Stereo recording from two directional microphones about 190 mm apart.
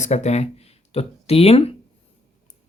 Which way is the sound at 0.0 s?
35° left (ahead or behind).